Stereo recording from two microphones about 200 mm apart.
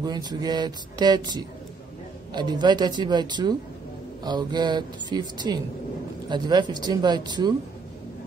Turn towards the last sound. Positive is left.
turn(degrees=-20)  # may be behind; listen again after turning